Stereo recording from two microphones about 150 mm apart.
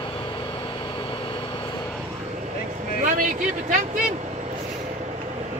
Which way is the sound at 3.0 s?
60° right (ahead or behind).